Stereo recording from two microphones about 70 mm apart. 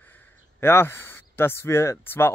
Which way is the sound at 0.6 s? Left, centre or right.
Left.